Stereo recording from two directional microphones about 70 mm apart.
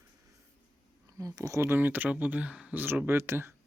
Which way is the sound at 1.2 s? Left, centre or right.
Right.